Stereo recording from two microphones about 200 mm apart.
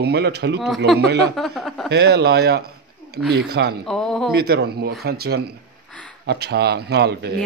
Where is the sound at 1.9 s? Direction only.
55° right (ahead or behind).